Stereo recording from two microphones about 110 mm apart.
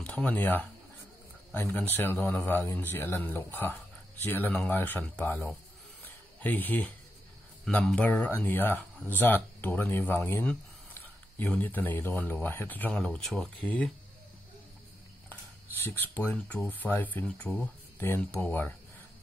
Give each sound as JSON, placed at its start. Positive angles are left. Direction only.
{"t": 0.0, "sound": "speech", "side_deg": 10}
{"t": 1.7, "sound": "speech", "side_deg": 15}
{"t": 6.0, "sound": "a sound", "side_deg": 15}
{"t": 7.7, "sound": "speech", "side_deg": 10}
{"t": 15.8, "sound": "speech", "side_deg": 15}
{"t": 17.2, "sound": "speech", "side_deg": 5}
{"t": 17.9, "sound": "speech", "side_deg": 20}